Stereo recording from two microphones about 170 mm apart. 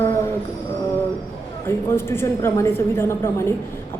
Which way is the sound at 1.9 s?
15° left (ahead or behind).